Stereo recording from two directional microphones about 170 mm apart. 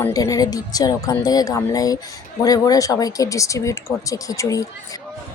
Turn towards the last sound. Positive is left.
turn(degrees=20)  # may be behind; listen again after turning